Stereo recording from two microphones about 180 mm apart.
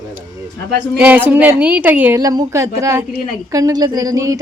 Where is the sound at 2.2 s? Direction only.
20° right (ahead or behind).